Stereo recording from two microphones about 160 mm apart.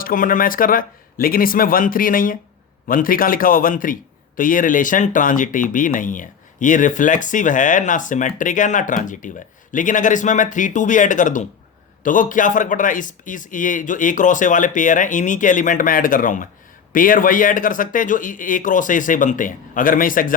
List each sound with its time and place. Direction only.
0.0 s a man's voice: 60° left (ahead or behind)